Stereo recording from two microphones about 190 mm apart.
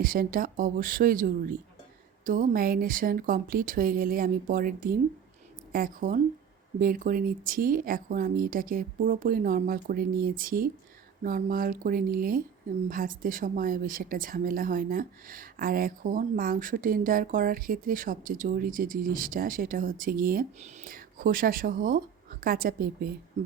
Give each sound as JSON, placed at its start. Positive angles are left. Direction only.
{"t": 0.0, "sound": "speech", "side_deg": -50}